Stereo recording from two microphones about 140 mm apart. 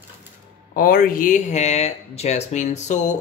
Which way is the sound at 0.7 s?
90° left.